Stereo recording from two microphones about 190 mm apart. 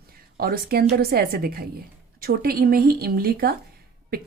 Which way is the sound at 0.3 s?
50° right (ahead or behind).